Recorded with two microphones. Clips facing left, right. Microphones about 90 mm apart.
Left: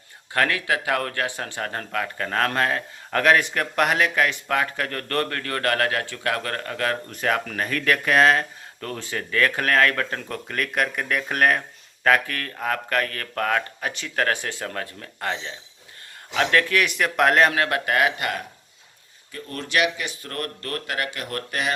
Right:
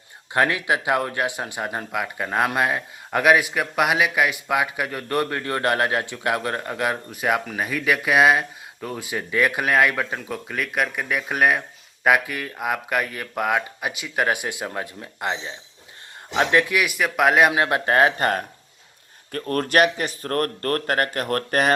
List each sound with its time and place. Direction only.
0.3 s speech: 20° right (ahead or behind)
17.5 s speech: 20° right (ahead or behind); by 18.4 s 40° right (ahead or behind)
19.3 s speech: 50° right (ahead or behind)